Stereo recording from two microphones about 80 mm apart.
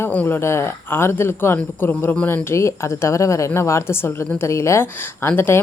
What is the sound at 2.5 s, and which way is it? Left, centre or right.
Speech, left.